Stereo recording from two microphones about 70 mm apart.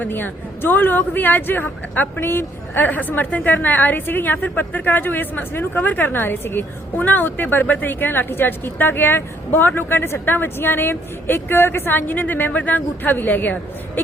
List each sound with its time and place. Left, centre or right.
0.0 s speech: left